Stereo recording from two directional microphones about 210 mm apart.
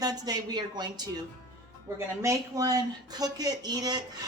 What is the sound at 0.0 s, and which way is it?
A woman's voice, 20° right (ahead or behind).